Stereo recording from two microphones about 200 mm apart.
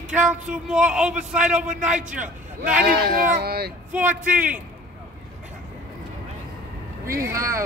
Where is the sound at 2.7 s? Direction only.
50° right (ahead or behind).